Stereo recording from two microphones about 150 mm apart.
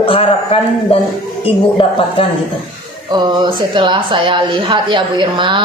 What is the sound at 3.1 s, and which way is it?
A woman's voice, 30° right (ahead or behind).